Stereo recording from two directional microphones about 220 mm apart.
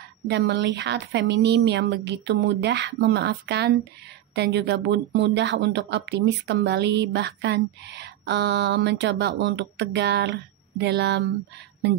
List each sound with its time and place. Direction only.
0.3 s speech: 50° right (ahead or behind)